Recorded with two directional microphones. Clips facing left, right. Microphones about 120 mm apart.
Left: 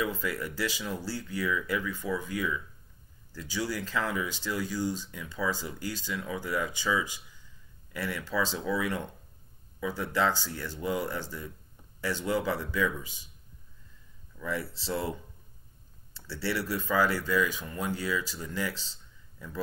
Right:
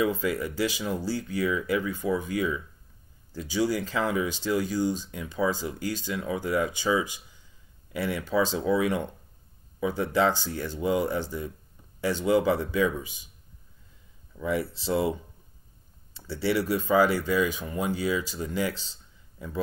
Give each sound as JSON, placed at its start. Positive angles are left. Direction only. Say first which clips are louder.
{"t": 0.0, "sound": "speech", "louder": "right 6 dB", "side_deg": -20}
{"t": 14.4, "sound": "speech", "louder": "right 6 dB", "side_deg": -15}